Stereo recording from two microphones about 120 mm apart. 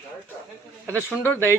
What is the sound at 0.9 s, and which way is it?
Speech, 20° left (ahead or behind).